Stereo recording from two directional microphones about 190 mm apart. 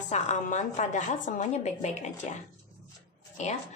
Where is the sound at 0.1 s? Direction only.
40° left (ahead or behind).